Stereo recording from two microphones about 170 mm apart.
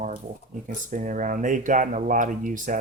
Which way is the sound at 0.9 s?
50° right (ahead or behind).